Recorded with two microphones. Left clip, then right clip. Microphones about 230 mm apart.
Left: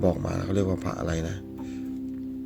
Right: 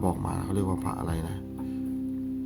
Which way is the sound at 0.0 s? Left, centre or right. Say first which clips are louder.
Left 4 dB; centre.